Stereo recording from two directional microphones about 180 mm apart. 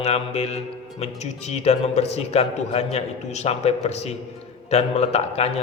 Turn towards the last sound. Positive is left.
turn(degrees=35)  # may be behind; listen again after turning